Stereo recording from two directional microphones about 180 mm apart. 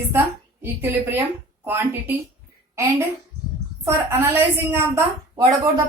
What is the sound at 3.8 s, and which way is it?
A woman's voice, 10° right (ahead or behind).